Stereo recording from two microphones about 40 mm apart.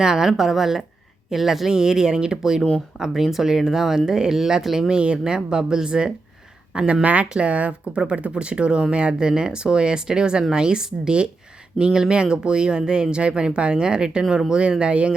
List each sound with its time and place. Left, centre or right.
0.0 s speech: centre
4.9 s speech: right